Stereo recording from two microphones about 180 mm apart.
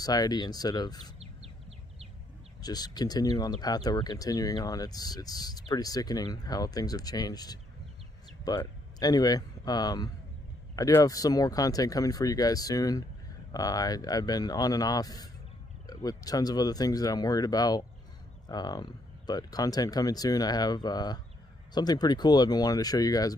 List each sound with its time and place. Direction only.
0.0 s speech: 20° left (ahead or behind)
2.6 s speech: 20° left (ahead or behind)